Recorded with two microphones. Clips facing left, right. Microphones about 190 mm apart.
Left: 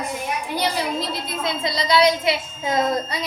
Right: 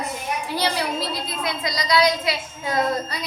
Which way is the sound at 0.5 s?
20° left (ahead or behind).